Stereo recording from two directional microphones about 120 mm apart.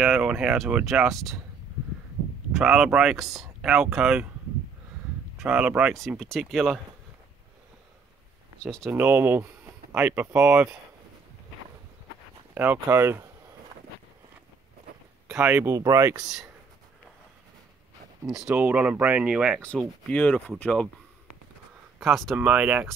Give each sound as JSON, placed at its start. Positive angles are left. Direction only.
{"t": 0.0, "sound": "speech", "side_deg": -5}
{"t": 2.5, "sound": "speech", "side_deg": -5}
{"t": 5.4, "sound": "speech", "side_deg": -10}
{"t": 5.9, "sound": "speech", "side_deg": 0}
{"t": 8.8, "sound": "speech", "side_deg": -15}
{"t": 12.8, "sound": "speech", "side_deg": -20}
{"t": 15.2, "sound": "a sound", "side_deg": -5}
{"t": 15.5, "sound": "speech", "side_deg": -20}
{"t": 16.2, "sound": "speech", "side_deg": -5}
{"t": 18.5, "sound": "speech", "side_deg": -15}
{"t": 20.1, "sound": "speech", "side_deg": 10}
{"t": 22.0, "sound": "speech", "side_deg": 0}
{"t": 22.5, "sound": "speech", "side_deg": -10}